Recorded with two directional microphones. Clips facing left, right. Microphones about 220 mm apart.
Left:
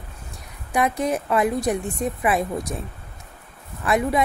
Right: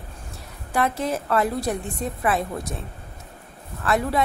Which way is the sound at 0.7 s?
15° left (ahead or behind).